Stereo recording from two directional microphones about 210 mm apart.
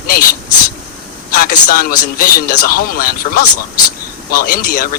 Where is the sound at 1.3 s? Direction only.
40° left (ahead or behind).